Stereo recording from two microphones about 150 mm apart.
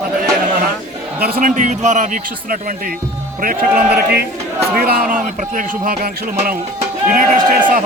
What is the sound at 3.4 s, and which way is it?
A man's voice, 70° right (ahead or behind).